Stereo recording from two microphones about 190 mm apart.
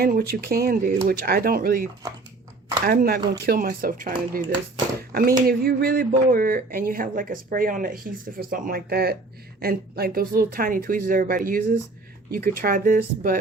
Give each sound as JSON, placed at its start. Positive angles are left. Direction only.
{"t": 0.0, "sound": "speech", "side_deg": -55}